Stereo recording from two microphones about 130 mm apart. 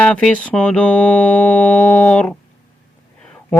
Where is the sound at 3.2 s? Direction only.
10° left (ahead or behind).